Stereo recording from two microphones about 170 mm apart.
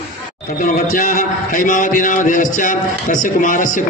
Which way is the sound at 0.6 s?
55° left (ahead or behind).